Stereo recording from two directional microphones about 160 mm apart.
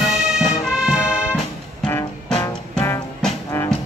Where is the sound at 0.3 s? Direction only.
5° right (ahead or behind).